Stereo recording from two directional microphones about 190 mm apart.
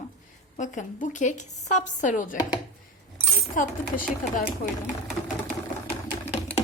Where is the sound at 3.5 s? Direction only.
45° left (ahead or behind).